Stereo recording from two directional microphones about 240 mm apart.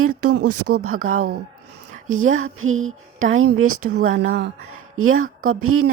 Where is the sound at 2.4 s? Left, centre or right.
Right.